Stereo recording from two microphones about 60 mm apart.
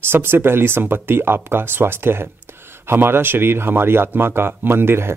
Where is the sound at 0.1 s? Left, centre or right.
Right.